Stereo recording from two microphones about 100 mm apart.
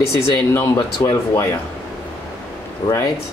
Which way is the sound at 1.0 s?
30° left (ahead or behind).